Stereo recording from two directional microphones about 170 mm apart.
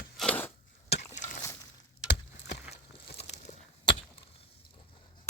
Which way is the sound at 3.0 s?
80° left.